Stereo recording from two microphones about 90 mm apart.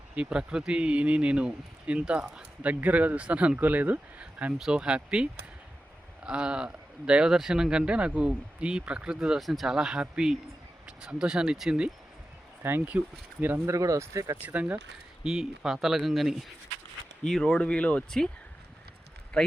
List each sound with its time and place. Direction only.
0.2 s speech: 10° right (ahead or behind)
12.6 s speech: 25° right (ahead or behind)
13.7 s speech: 40° right (ahead or behind)
14.4 s speech: 15° right (ahead or behind)
15.2 s speech: 5° right (ahead or behind)